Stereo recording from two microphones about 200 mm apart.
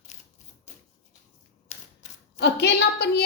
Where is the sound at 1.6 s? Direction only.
35° left (ahead or behind).